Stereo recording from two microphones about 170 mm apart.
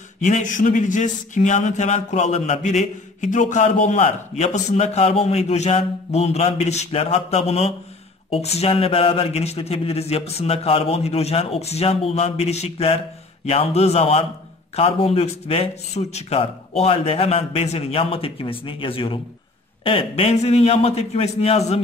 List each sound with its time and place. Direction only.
0.2 s speech: 45° left (ahead or behind)